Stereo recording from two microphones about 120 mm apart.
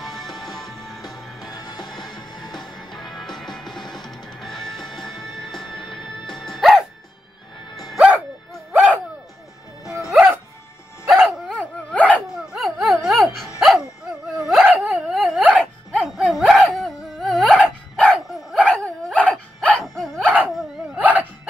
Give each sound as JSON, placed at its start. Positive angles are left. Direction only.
{"t": 0.3, "sound": "music", "side_deg": 0}
{"t": 1.5, "sound": "music", "side_deg": 35}
{"t": 2.5, "sound": "music", "side_deg": 5}
{"t": 8.7, "sound": "music", "side_deg": -15}
{"t": 10.0, "sound": "music", "side_deg": -10}
{"t": 11.1, "sound": "dog", "side_deg": 0}
{"t": 12.4, "sound": "a sound", "side_deg": 0}
{"t": 13.6, "sound": "dog", "side_deg": 0}
{"t": 18.7, "sound": "dog", "side_deg": 10}
{"t": 21.0, "sound": "wail", "side_deg": -15}